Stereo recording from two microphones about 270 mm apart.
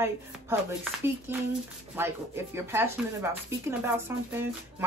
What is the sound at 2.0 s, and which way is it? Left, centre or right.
Speech, centre.